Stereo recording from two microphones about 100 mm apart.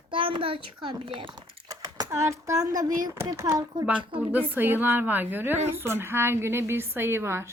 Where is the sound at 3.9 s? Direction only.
15° right (ahead or behind).